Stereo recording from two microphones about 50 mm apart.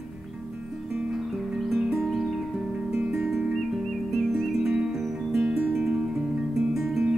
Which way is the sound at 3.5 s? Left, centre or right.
Centre.